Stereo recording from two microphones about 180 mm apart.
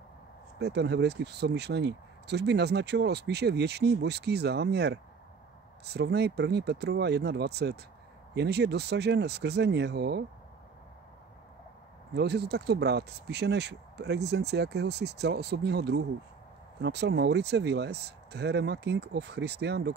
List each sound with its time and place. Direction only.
0.6 s speech: 65° right (ahead or behind)
12.1 s speech: 65° right (ahead or behind)